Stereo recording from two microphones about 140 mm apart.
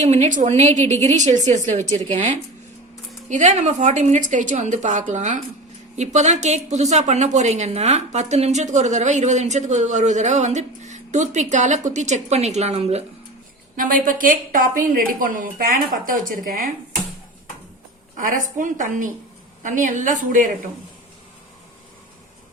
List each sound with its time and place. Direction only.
0.0 s a woman's voice: 55° right (ahead or behind)
13.7 s a woman's voice: 75° right (ahead or behind)
18.2 s a woman's voice: 70° right (ahead or behind)